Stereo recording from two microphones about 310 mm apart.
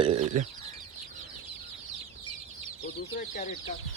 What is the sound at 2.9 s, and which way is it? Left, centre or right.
Chicken, left.